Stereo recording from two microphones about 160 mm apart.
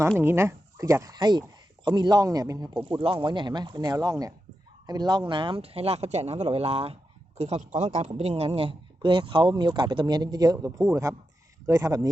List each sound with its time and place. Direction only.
0.2 s a man's voice: 15° right (ahead or behind)